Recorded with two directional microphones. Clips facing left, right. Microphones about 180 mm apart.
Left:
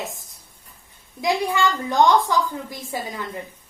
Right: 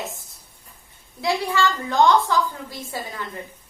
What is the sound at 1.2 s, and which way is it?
A woman's voice, 15° left (ahead or behind).